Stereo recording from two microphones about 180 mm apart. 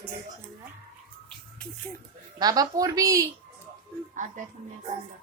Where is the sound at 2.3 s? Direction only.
20° right (ahead or behind).